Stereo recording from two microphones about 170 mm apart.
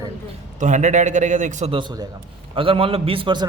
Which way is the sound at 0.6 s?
45° right (ahead or behind).